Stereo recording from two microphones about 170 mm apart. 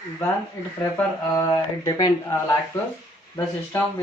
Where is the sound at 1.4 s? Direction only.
15° left (ahead or behind).